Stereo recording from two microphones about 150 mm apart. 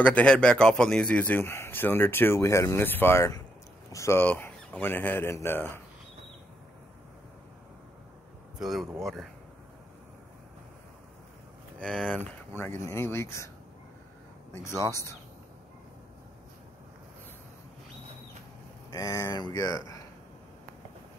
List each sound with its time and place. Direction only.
0.0 s a man's voice: 10° left (ahead or behind)
8.5 s speech: centre (ahead or behind)
11.8 s a man's voice: 5° left (ahead or behind)
14.5 s speech: 20° left (ahead or behind)
18.9 s speech: 25° left (ahead or behind)